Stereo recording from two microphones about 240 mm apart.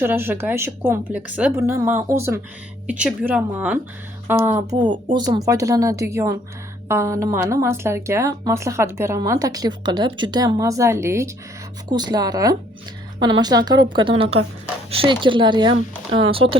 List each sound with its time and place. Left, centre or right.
0.0 s a woman's voice: centre